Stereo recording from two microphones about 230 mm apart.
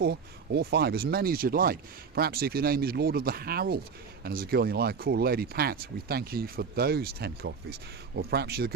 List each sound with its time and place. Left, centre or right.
0.0 s speech: right